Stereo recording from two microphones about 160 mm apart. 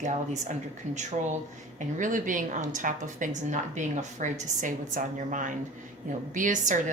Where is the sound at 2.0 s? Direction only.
55° right (ahead or behind).